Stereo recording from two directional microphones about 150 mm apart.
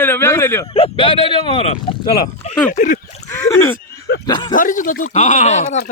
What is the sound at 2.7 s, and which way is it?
Speech, 60° left (ahead or behind).